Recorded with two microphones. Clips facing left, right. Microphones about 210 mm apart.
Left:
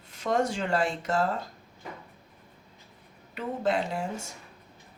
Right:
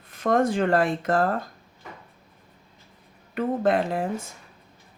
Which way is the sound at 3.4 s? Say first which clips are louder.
Right 6 dB; 55° right (ahead or behind).